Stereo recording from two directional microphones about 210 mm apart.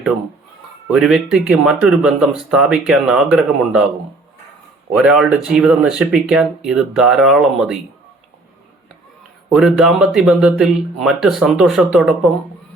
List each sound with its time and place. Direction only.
0.9 s speech: 5° right (ahead or behind)
4.9 s speech: centre (ahead or behind)
9.5 s speech: 5° right (ahead or behind)